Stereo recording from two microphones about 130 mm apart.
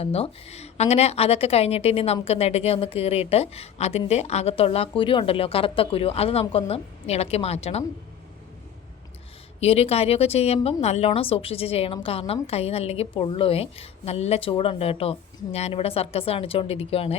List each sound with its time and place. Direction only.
0.0 s a woman's voice: 50° left (ahead or behind)
9.6 s a woman's voice: 50° left (ahead or behind)